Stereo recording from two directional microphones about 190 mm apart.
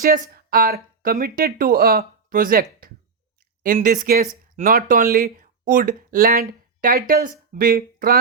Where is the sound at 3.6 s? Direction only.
45° right (ahead or behind).